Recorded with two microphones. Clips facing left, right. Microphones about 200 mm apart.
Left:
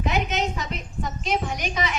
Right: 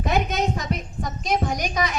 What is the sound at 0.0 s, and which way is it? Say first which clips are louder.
Speech: right 2 dB; 40° right (ahead or behind).